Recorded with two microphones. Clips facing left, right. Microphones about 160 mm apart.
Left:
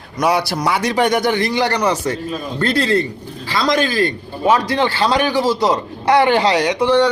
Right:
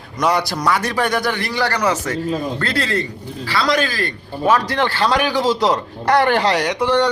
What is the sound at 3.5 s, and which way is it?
A man's voice, 15° left (ahead or behind).